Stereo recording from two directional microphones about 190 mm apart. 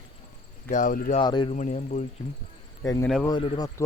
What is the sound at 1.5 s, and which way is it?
Speech, 40° left (ahead or behind).